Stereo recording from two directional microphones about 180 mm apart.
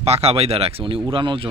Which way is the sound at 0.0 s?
35° right (ahead or behind).